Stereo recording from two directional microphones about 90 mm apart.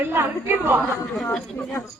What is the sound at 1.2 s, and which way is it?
Speech, 10° left (ahead or behind).